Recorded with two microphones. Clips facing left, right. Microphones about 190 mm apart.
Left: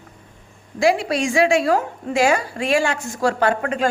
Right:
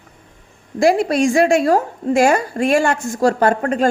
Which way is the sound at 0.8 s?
45° right (ahead or behind).